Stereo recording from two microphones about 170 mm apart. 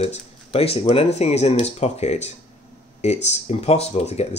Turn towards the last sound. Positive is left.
turn(degrees=40)  # may be behind; listen again after turning